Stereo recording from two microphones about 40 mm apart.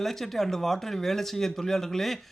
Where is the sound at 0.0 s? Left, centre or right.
Centre.